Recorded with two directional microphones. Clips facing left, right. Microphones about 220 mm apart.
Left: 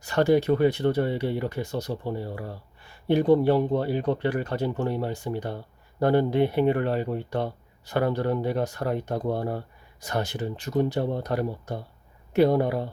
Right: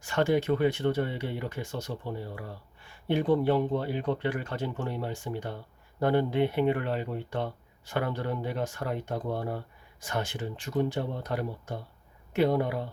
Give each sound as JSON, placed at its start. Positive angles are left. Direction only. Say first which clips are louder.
{"t": 0.0, "sound": "speech", "louder": "left 5 dB", "side_deg": 35}